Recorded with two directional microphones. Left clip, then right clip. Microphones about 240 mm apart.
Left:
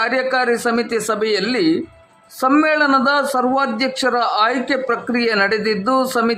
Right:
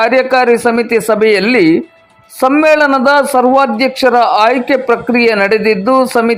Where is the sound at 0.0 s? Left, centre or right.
Centre.